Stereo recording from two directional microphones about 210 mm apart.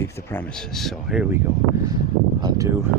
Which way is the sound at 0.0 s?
10° left (ahead or behind).